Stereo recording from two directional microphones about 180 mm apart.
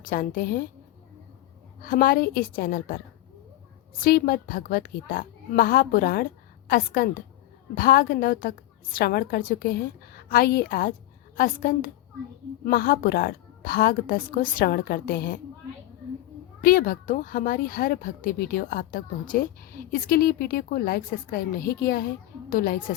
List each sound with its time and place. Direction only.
0.1 s a woman's voice: 50° left (ahead or behind)
1.8 s a woman's voice: 50° left (ahead or behind)
4.0 s a woman's voice: 55° left (ahead or behind)
16.6 s a woman's voice: 50° left (ahead or behind)